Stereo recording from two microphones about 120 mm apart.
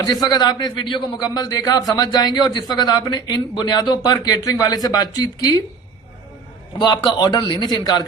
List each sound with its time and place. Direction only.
0.0 s a man's voice: 35° left (ahead or behind)
6.7 s a man's voice: 35° left (ahead or behind)